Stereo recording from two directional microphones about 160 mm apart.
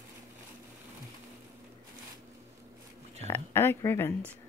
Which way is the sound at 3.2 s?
15° left (ahead or behind).